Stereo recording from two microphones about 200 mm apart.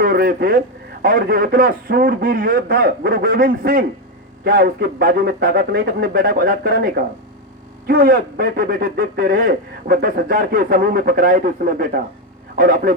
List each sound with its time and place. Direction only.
0.0 s a man's voice: 50° right (ahead or behind)